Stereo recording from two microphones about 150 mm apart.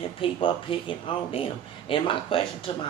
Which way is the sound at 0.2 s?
35° left (ahead or behind).